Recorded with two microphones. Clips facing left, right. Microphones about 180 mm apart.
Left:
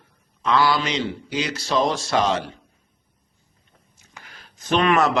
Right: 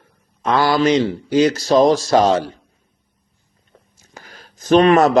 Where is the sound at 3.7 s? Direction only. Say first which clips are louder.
Right 5 dB; 40° right (ahead or behind).